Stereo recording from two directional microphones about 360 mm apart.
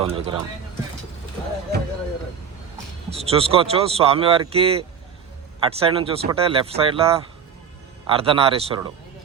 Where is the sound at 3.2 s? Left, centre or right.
Centre.